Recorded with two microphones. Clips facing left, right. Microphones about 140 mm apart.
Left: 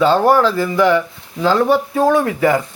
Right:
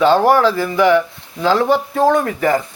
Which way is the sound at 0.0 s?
Centre (ahead or behind).